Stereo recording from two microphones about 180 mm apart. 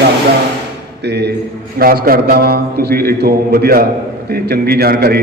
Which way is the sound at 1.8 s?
55° right (ahead or behind).